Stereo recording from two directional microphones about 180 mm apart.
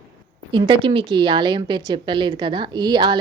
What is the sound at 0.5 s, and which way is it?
A woman's voice, 25° right (ahead or behind).